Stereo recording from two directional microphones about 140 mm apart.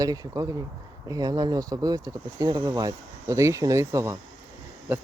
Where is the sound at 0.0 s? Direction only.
25° right (ahead or behind).